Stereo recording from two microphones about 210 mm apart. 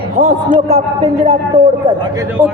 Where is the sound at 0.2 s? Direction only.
35° right (ahead or behind).